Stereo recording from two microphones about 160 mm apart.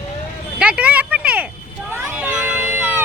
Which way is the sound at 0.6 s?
5° right (ahead or behind).